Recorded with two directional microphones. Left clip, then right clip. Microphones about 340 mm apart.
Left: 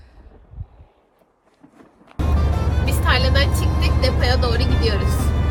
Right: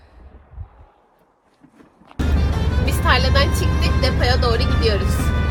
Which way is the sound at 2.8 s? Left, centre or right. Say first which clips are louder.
Right 2 dB; centre.